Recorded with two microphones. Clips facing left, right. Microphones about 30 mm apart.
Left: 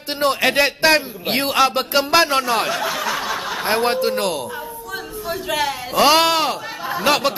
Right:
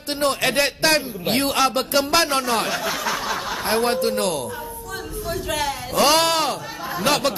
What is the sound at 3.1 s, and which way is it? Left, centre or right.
Snicker, centre.